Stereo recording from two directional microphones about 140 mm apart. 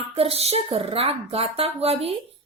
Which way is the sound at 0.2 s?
45° right (ahead or behind).